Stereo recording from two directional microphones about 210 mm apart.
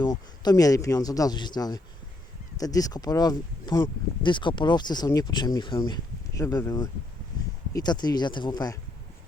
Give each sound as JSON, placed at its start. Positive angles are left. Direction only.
{"t": 0.0, "sound": "speech", "side_deg": 20}